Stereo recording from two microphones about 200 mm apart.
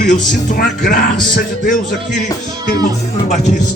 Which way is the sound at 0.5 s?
50° left (ahead or behind).